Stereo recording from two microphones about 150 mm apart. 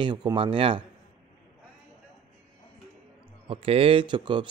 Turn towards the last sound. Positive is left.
turn(degrees=-30)  # may be behind; listen again after turning